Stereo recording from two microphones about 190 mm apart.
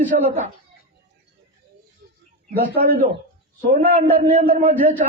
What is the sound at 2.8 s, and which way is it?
Speech, 45° right (ahead or behind).